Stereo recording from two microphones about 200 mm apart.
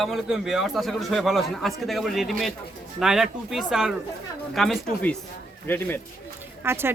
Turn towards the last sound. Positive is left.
turn(degrees=-10)  # may be behind; listen again after turning